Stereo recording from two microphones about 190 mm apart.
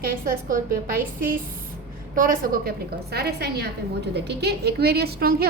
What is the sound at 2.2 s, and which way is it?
A woman's voice, 45° right (ahead or behind).